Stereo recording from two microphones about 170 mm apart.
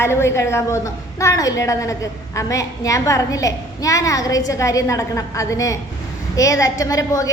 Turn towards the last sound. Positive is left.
turn(degrees=20)  # may be behind; listen again after turning